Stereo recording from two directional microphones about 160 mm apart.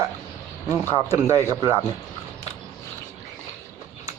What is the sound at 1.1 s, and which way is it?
Speech, 20° right (ahead or behind).